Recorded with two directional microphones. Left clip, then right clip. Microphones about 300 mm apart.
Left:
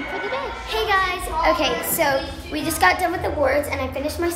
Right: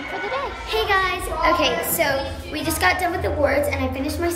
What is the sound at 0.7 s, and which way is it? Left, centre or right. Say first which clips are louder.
A woman's voice: even; centre.